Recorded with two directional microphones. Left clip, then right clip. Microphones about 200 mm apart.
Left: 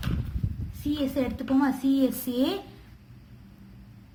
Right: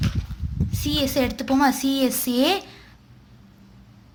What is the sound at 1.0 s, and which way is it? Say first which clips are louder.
A woman's voice: right 8 dB; 50° right (ahead or behind).